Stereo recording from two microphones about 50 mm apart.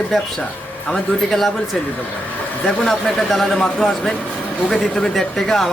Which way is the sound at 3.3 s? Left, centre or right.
Centre.